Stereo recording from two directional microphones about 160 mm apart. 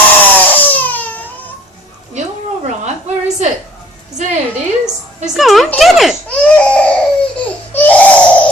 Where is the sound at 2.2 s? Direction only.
45° right (ahead or behind).